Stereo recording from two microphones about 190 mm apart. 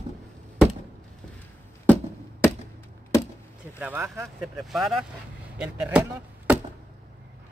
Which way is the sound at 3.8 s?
10° right (ahead or behind).